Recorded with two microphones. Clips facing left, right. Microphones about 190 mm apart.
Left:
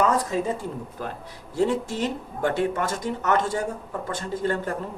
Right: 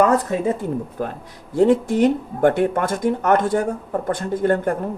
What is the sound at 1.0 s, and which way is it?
Speech, 50° right (ahead or behind).